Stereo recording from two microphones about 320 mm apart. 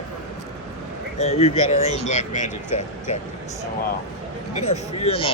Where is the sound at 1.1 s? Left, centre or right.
Centre.